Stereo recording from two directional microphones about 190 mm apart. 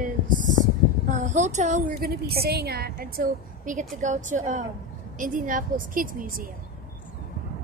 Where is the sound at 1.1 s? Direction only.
40° right (ahead or behind).